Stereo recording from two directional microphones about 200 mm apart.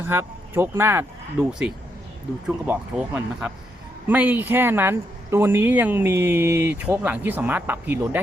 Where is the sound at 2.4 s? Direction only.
5° right (ahead or behind).